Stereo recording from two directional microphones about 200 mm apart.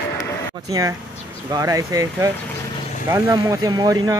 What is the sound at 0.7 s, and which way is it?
Speech, 20° right (ahead or behind).